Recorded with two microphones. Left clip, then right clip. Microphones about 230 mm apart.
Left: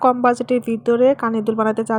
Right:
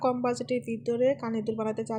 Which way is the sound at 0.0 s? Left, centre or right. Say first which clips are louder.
Left 12 dB; left.